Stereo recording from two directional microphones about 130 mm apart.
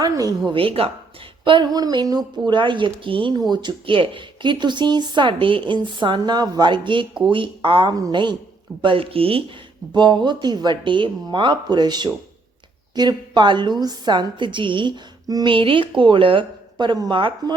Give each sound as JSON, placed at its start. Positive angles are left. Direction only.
{"t": 0.4, "sound": "speech", "side_deg": -45}